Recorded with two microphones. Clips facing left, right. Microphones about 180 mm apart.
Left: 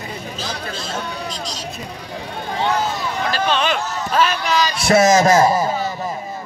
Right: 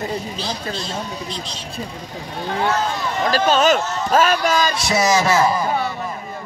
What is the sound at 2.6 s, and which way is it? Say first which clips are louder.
Speech: left 1 dB; 10° left (ahead or behind).